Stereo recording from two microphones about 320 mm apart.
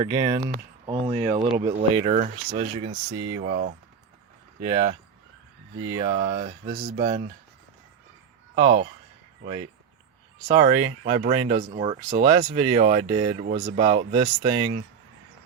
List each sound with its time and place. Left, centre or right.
0.0 s speech: centre
4.6 s speech: centre
5.7 s speech: right
6.1 s speech: right
8.5 s speech: centre
10.5 s speech: centre